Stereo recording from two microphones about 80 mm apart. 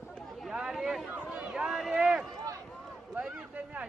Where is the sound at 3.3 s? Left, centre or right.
Centre.